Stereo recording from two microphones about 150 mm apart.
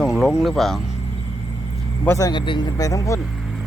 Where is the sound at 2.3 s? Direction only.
30° left (ahead or behind).